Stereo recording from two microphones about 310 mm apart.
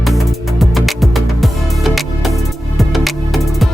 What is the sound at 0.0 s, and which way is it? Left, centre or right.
Music, centre.